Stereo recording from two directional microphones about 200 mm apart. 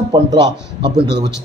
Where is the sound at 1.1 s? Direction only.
60° right (ahead or behind).